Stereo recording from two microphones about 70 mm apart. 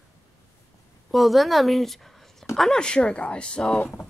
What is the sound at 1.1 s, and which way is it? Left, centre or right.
Speech, centre.